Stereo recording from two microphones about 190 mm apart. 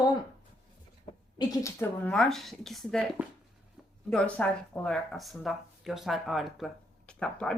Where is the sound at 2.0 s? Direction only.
Centre (ahead or behind).